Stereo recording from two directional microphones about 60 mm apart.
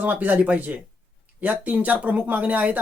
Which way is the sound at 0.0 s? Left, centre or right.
Right.